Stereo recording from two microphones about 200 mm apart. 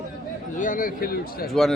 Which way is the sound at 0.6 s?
40° left (ahead or behind).